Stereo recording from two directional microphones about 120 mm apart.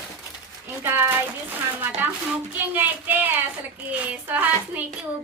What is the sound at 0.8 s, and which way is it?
Speech, 20° right (ahead or behind).